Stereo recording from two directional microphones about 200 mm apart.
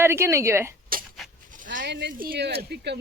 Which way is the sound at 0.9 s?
45° right (ahead or behind).